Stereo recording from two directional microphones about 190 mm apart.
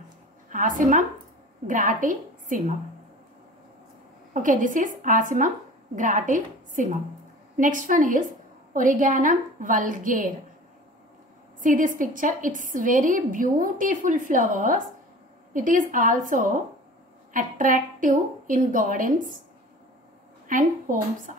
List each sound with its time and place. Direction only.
0.5 s a woman's voice: 45° right (ahead or behind)
4.3 s a woman's voice: 45° right (ahead or behind)
11.6 s a woman's voice: 45° right (ahead or behind)
20.4 s a woman's voice: 45° right (ahead or behind)